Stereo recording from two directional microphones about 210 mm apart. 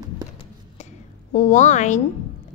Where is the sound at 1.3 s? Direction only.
35° left (ahead or behind).